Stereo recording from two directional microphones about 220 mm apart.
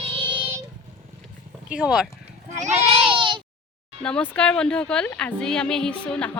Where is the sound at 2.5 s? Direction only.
30° right (ahead or behind).